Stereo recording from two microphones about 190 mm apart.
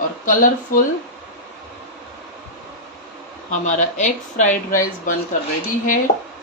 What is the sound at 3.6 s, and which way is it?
Speech, 40° left (ahead or behind).